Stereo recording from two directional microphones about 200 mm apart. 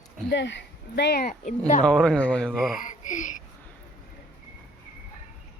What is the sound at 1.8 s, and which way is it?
Speech, 5° left (ahead or behind).